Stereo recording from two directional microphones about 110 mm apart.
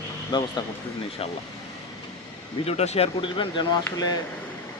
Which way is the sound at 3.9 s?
35° left (ahead or behind).